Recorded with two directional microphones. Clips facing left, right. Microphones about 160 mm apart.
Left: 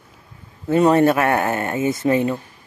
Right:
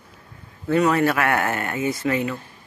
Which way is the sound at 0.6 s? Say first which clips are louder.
Left 4 dB; 25° left (ahead or behind).